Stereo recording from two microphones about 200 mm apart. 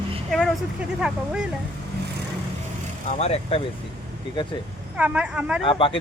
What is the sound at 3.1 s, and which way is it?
Speech, 30° left (ahead or behind).